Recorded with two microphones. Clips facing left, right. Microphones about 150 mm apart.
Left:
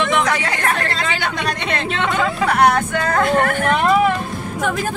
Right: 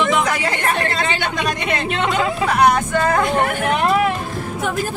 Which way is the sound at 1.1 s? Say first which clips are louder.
Right 1 dB; 20° right (ahead or behind).